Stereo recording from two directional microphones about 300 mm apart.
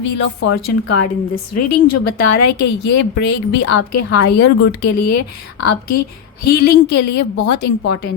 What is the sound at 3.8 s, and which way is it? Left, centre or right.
Speech, left.